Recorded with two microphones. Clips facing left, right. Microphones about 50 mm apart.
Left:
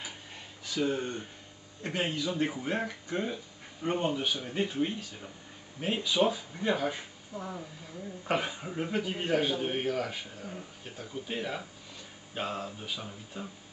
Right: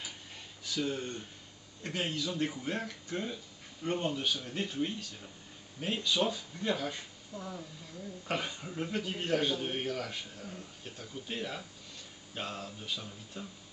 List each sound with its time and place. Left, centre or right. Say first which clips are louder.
0.7 s a man's voice: left 4 dB; centre